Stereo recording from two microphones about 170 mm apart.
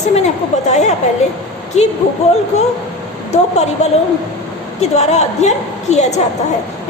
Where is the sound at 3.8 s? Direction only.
45° left (ahead or behind).